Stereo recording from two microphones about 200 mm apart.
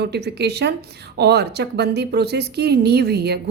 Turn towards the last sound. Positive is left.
turn(degrees=-55)  # may be behind; listen again after turning